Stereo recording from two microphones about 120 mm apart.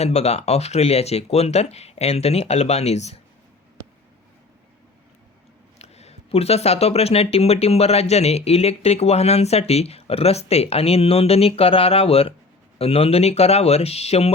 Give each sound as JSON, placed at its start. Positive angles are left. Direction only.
{"t": 0.0, "sound": "speech", "side_deg": 65}
{"t": 5.8, "sound": "speech", "side_deg": 60}